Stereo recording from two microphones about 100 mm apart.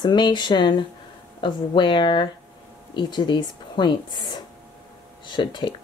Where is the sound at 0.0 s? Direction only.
50° left (ahead or behind).